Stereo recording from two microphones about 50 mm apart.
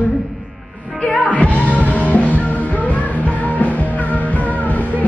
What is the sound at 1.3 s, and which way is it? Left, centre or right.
Music, left.